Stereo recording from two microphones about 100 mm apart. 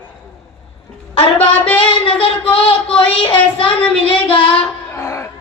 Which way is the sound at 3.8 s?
15° left (ahead or behind).